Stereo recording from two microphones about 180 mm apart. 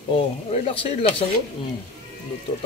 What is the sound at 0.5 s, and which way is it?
Speech, 30° left (ahead or behind).